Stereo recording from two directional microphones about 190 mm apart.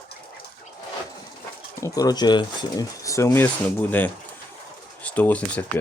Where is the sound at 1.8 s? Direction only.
20° left (ahead or behind).